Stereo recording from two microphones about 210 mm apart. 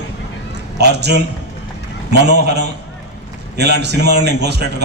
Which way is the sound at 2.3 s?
50° right (ahead or behind).